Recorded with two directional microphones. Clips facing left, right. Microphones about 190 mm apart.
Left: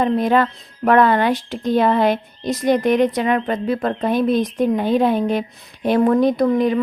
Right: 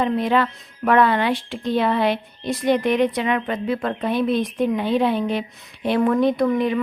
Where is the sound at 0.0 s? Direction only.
45° left (ahead or behind).